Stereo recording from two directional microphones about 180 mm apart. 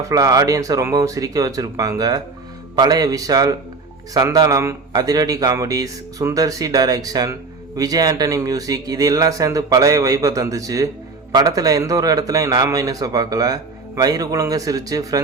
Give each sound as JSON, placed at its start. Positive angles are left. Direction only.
{"t": 0.1, "sound": "speech", "side_deg": -20}